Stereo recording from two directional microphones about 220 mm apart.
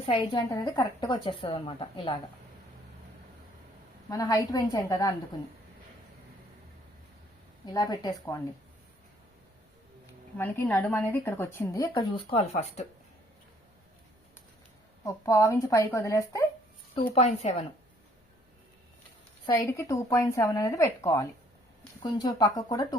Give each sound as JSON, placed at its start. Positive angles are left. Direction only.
{"t": 0.0, "sound": "a woman's voice", "side_deg": 25}
{"t": 4.1, "sound": "a woman's voice", "side_deg": 15}
{"t": 7.6, "sound": "a woman's voice", "side_deg": 15}
{"t": 10.3, "sound": "a woman's voice", "side_deg": 10}
{"t": 15.0, "sound": "a woman's voice", "side_deg": 15}
{"t": 19.5, "sound": "a woman's voice", "side_deg": 15}